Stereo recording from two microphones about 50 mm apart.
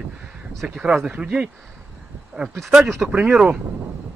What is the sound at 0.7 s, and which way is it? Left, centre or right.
Speech, centre.